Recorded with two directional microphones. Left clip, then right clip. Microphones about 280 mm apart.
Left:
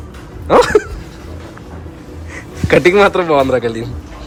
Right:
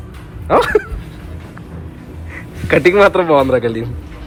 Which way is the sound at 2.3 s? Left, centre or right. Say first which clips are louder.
Left 2 dB; centre.